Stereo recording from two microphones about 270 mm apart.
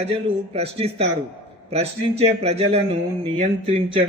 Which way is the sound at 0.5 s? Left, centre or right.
Right.